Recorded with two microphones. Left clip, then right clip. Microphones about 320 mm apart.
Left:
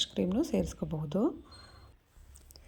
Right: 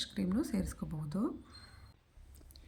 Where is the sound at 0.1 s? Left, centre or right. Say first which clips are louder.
Left 6 dB; centre.